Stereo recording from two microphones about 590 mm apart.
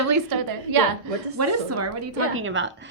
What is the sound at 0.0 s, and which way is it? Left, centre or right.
A woman's voice, right.